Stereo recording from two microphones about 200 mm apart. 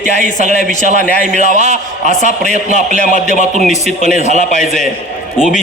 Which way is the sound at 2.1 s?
40° left (ahead or behind).